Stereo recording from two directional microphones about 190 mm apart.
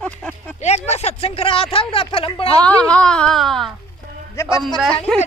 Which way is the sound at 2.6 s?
5° left (ahead or behind).